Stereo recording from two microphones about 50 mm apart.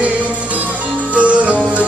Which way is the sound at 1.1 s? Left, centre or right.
Right.